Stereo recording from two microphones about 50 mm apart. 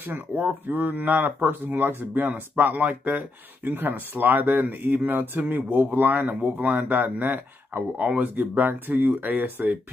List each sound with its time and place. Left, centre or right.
0.0 s speech: right